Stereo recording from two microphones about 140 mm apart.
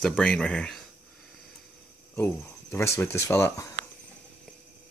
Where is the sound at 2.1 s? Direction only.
15° left (ahead or behind).